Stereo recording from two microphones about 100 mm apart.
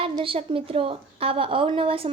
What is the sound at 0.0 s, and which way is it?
A woman's voice, 70° right (ahead or behind).